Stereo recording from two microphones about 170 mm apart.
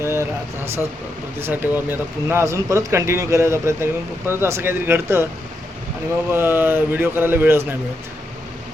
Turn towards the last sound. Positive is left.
turn(degrees=-15)  # may be behind; listen again after turning